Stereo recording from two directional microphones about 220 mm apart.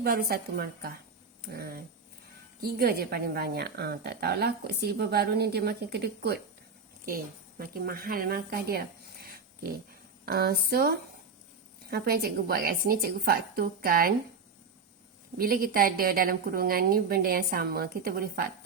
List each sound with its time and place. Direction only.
0.0 s a woman's voice: 45° right (ahead or behind)
7.6 s a woman's voice: 45° right (ahead or behind)
15.4 s a woman's voice: 40° right (ahead or behind)